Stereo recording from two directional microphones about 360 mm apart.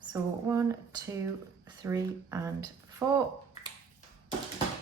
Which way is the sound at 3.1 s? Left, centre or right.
Centre.